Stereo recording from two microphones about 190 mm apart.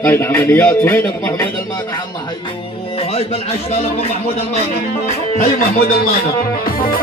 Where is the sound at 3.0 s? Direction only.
30° left (ahead or behind).